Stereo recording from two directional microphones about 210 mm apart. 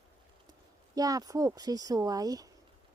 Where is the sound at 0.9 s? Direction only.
15° right (ahead or behind).